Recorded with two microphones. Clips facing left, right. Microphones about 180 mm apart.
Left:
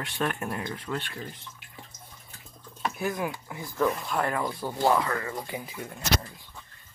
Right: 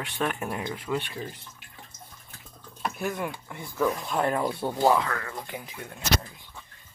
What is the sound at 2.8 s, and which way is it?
Speech, centre (ahead or behind).